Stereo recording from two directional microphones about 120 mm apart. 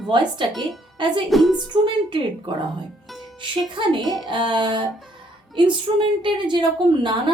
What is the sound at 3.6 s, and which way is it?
Speech, 40° right (ahead or behind).